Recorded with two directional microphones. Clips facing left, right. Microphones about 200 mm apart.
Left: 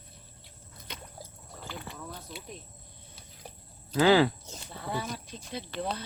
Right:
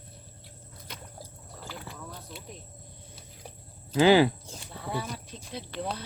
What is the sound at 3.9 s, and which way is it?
Speech, 20° right (ahead or behind).